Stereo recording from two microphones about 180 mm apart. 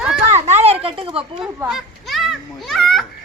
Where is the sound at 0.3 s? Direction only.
35° right (ahead or behind).